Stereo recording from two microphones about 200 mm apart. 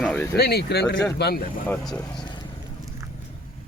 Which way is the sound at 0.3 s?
55° left (ahead or behind).